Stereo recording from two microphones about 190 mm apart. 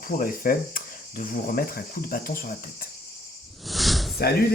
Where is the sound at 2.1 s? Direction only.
50° left (ahead or behind).